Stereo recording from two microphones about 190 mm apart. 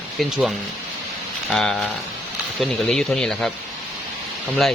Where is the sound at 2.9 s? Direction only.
5° left (ahead or behind).